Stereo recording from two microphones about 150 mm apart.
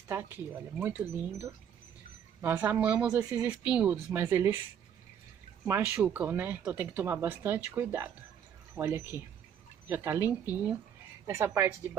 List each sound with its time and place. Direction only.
0.1 s speech: 15° right (ahead or behind)
6.0 s speech: 10° right (ahead or behind)